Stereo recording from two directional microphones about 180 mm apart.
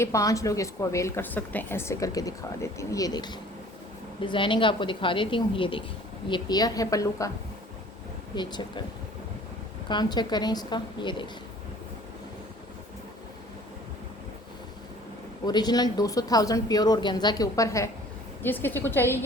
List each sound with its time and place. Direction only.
0.0 s a woman's voice: 15° left (ahead or behind)
8.4 s speech: 25° left (ahead or behind)
9.9 s speech: 25° left (ahead or behind)
15.4 s a woman's voice: 20° left (ahead or behind)